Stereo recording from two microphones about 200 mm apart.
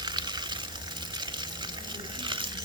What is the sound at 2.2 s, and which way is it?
Stir, 25° right (ahead or behind).